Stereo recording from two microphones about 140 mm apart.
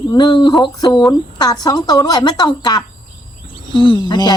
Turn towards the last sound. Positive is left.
turn(degrees=30)  # may be behind; listen again after turning